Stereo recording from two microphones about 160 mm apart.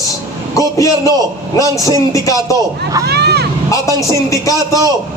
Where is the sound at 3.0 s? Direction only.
90° right.